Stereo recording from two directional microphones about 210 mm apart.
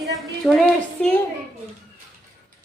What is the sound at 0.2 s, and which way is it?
Speech, centre (ahead or behind).